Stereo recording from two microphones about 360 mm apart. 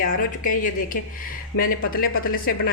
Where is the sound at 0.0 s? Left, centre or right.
Left.